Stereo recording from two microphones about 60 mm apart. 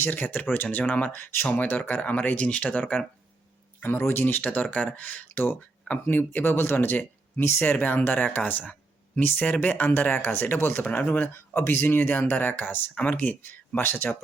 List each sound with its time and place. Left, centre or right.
0.0 s speech: left
3.8 s speech: left